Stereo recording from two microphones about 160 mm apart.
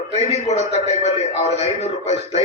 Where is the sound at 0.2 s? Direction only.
45° left (ahead or behind).